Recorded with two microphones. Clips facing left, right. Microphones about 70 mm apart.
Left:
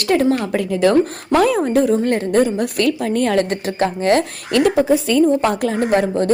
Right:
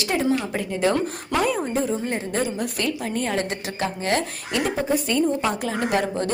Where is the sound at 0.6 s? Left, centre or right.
Left.